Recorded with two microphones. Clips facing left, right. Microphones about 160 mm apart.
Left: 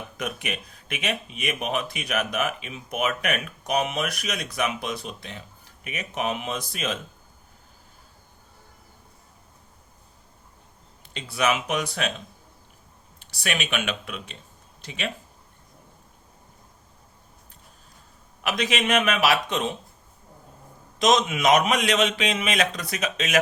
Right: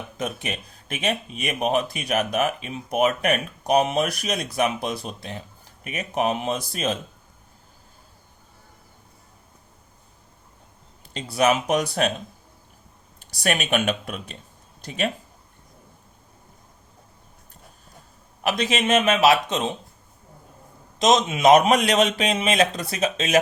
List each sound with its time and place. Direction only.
0.2 s speech: 30° right (ahead or behind)
11.1 s speech: 40° right (ahead or behind)
13.1 s speech: 45° right (ahead or behind)
18.4 s a man's voice: 30° right (ahead or behind)
21.0 s a man's voice: 25° right (ahead or behind)